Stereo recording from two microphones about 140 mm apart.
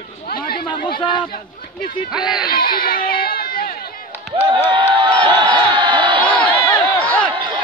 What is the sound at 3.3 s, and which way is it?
Run, 90° left.